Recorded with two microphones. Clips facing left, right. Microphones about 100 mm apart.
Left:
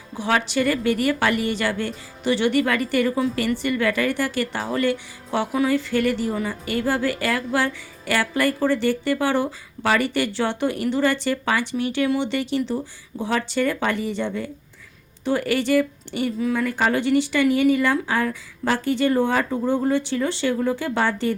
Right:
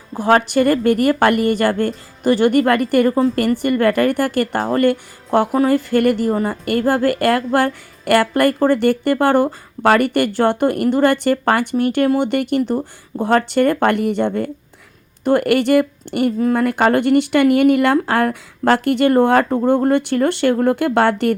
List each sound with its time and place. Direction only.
0.1 s speech: 45° right (ahead or behind); by 21.3 s 65° right (ahead or behind)